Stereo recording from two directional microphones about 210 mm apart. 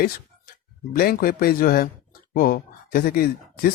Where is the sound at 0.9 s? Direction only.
45° left (ahead or behind).